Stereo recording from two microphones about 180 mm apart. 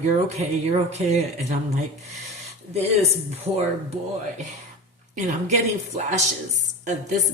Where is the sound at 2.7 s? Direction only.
35° right (ahead or behind).